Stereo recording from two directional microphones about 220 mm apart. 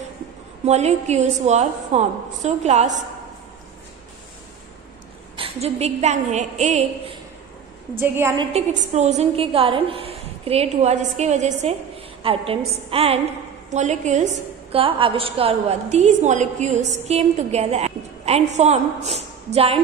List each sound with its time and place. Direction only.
0.7 s a woman's voice: 30° right (ahead or behind)
5.3 s a woman's voice: 25° right (ahead or behind)
8.0 s a woman's voice: 10° right (ahead or behind)
8.5 s a woman's voice: 30° right (ahead or behind)